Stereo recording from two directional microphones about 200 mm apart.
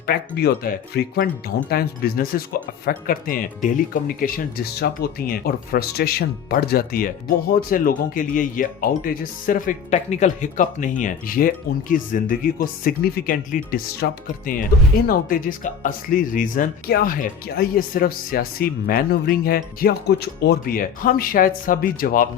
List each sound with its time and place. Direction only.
0.0 s speech: 50° left (ahead or behind)